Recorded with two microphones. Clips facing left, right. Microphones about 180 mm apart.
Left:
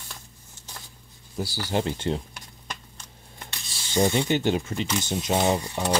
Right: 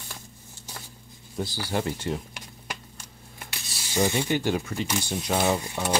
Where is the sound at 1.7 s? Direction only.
25° left (ahead or behind).